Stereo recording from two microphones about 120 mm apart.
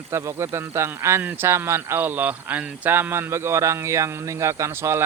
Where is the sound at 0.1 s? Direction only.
20° right (ahead or behind).